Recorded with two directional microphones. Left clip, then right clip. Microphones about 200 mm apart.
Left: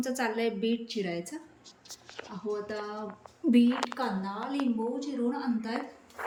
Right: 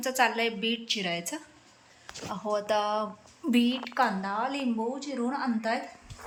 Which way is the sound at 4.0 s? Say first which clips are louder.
Right 6 dB; 15° right (ahead or behind).